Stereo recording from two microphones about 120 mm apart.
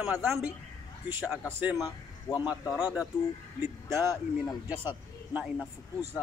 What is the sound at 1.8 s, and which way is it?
Speech, 30° left (ahead or behind).